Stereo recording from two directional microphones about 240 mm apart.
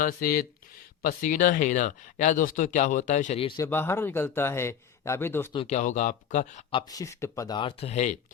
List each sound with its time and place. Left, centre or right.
0.0 s speech: left
3.6 s a man's voice: centre
5.5 s speech: left